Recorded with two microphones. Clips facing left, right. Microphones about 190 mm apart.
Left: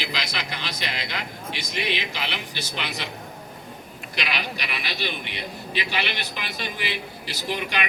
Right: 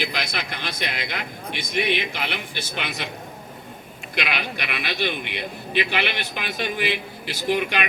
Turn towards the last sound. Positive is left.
turn(degrees=-55)  # may be behind; listen again after turning